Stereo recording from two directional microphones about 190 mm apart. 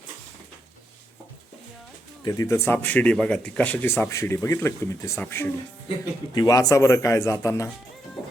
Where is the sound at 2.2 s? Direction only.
15° left (ahead or behind).